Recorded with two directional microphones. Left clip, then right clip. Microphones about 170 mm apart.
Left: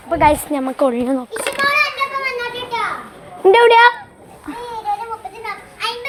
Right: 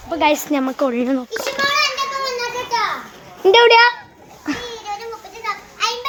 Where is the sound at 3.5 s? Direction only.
20° right (ahead or behind).